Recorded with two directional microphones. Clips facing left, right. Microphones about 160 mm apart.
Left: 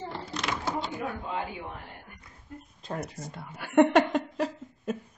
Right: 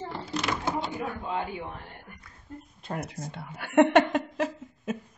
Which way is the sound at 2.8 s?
5° right (ahead or behind).